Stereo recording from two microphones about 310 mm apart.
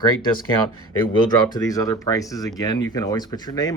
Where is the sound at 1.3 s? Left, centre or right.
Centre.